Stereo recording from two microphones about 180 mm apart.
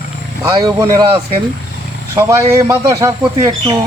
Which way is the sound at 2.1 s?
15° right (ahead or behind).